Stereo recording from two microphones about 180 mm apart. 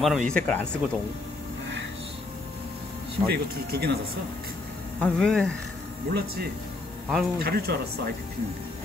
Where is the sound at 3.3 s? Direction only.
65° right (ahead or behind).